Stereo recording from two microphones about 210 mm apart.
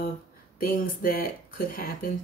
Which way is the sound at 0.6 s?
45° left (ahead or behind).